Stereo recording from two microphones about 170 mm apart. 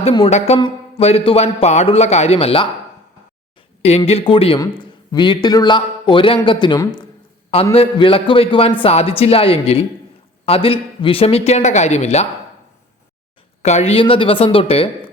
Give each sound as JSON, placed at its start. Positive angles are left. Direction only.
{"t": 0.0, "sound": "a man's voice", "side_deg": 35}
{"t": 3.8, "sound": "a man's voice", "side_deg": 35}
{"t": 13.6, "sound": "a man's voice", "side_deg": 40}